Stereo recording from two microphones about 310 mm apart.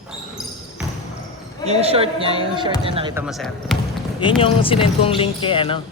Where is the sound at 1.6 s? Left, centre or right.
Centre.